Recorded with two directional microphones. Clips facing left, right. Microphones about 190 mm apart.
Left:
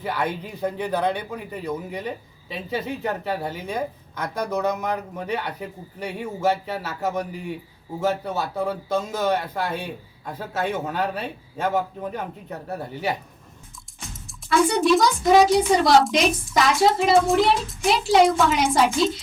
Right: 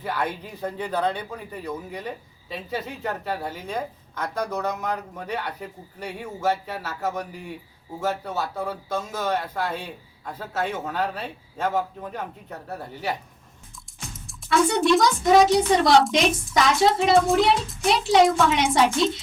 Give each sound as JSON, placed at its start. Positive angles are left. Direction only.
{"t": 0.0, "sound": "speech", "side_deg": 15}
{"t": 14.3, "sound": "a child's voice", "side_deg": 0}